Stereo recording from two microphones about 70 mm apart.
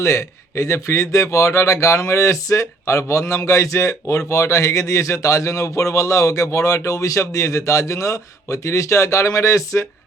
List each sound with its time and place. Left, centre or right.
0.0 s speech: left